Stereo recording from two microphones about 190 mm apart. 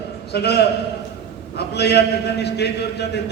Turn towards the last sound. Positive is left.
turn(degrees=60)  # may be behind; listen again after turning